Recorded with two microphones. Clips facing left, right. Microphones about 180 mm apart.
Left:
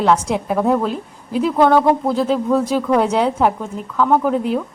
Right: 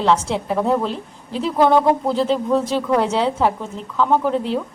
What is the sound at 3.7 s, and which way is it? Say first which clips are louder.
Speech: left 2 dB; 5° left (ahead or behind).